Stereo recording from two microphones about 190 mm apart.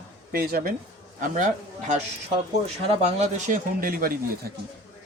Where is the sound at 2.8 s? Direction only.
30° right (ahead or behind).